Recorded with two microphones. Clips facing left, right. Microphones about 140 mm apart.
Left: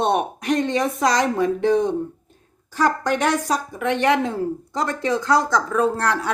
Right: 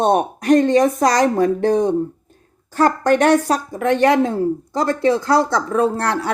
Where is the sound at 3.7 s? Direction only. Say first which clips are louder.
Right 5 dB; 40° right (ahead or behind).